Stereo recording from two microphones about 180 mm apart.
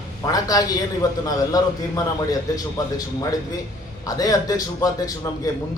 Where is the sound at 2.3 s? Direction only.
20° left (ahead or behind).